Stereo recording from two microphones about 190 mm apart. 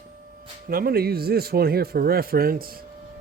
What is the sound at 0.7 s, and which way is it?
Speech, 50° right (ahead or behind).